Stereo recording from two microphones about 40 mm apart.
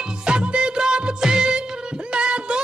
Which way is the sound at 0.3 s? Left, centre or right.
Right.